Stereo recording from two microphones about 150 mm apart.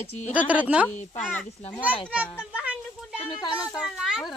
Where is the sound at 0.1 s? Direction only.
50° left (ahead or behind).